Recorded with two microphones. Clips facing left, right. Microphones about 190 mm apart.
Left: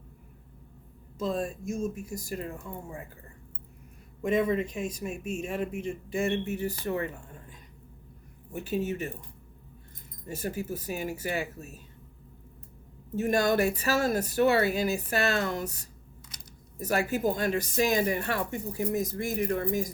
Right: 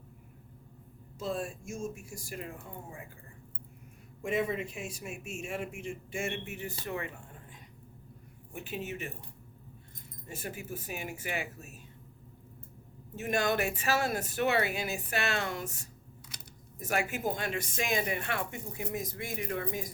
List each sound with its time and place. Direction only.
1.3 s a woman's voice: 40° left (ahead or behind)
4.9 s a woman's voice: 35° left (ahead or behind)
8.5 s a woman's voice: 40° left (ahead or behind)
10.2 s a woman's voice: 40° left (ahead or behind)
13.1 s a woman's voice: 40° left (ahead or behind)